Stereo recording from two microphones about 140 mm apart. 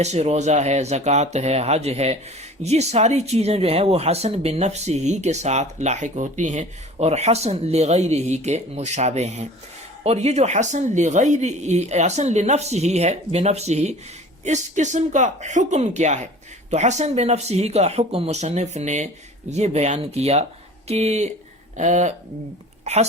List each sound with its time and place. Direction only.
0.0 s a woman's voice: 50° right (ahead or behind)